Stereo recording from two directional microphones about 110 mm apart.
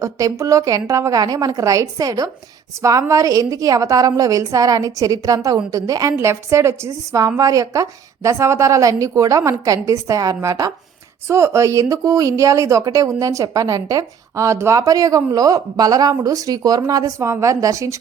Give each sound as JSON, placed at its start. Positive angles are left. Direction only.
{"t": 0.0, "sound": "a woman's voice", "side_deg": -30}